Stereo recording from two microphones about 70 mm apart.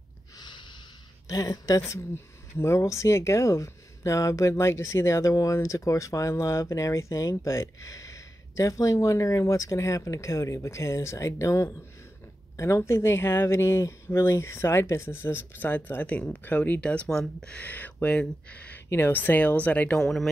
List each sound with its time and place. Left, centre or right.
0.4 s snort: left
1.3 s a woman's voice: left
1.8 s speech: left; by 18.8 s centre
18.9 s speech: left
20.0 s speech: centre